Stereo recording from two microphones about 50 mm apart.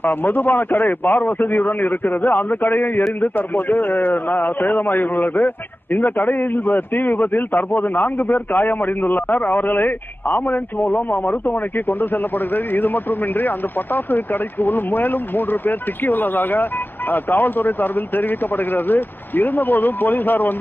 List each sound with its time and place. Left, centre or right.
0.0 s a man's voice: left